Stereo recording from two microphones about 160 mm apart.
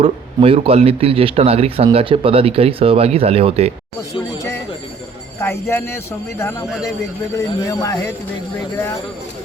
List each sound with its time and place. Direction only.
0.0 s speech: 35° right (ahead or behind)
5.4 s speech: 15° left (ahead or behind)